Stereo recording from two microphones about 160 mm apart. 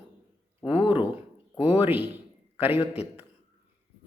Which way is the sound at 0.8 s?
10° right (ahead or behind).